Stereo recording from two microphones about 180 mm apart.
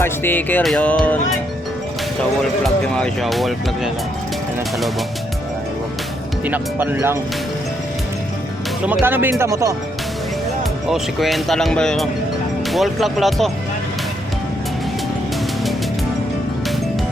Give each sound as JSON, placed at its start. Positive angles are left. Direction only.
{"t": 0.0, "sound": "speech", "side_deg": 10}
{"t": 2.6, "sound": "speech", "side_deg": 5}
{"t": 6.4, "sound": "speech", "side_deg": -10}
{"t": 8.9, "sound": "speech", "side_deg": -10}
{"t": 10.8, "sound": "speech", "side_deg": 0}